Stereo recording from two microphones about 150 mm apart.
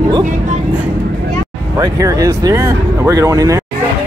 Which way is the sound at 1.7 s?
20° right (ahead or behind).